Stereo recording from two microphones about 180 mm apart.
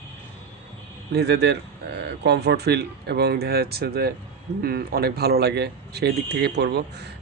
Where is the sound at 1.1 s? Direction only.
70° right (ahead or behind).